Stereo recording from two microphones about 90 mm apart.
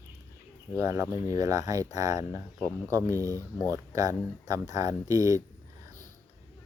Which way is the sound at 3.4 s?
25° left (ahead or behind).